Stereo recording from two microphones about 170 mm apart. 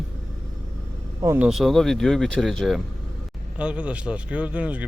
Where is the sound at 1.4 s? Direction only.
Centre (ahead or behind).